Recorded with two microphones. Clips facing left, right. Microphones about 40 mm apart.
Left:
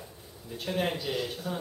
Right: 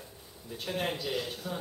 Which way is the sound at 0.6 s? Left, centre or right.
Centre.